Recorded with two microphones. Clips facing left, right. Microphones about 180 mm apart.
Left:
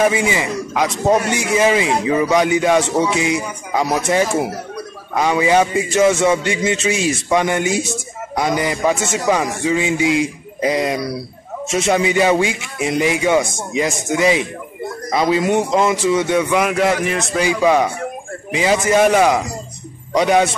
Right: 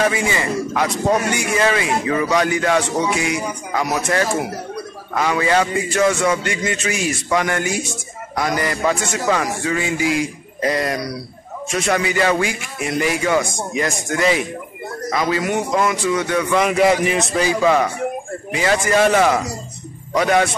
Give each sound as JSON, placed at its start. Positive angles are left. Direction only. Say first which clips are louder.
{"t": 0.0, "sound": "a man's voice", "louder": "left 3 dB", "side_deg": 20}
{"t": 5.1, "sound": "a man's voice", "louder": "left 3 dB", "side_deg": 15}
{"t": 16.7, "sound": "a man's voice", "louder": "right 2 dB", "side_deg": -5}
{"t": 17.4, "sound": "a man's voice", "louder": "left 2 dB", "side_deg": 15}